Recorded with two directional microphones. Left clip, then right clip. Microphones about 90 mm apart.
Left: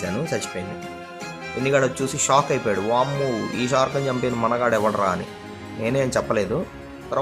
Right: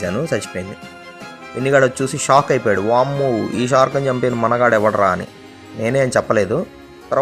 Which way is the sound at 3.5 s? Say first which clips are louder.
Right 6 dB; 65° right (ahead or behind).